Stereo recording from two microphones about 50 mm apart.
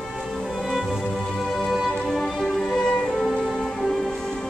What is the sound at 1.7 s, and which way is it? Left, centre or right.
Music, centre.